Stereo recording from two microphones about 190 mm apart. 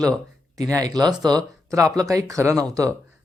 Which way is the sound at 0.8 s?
20° right (ahead or behind).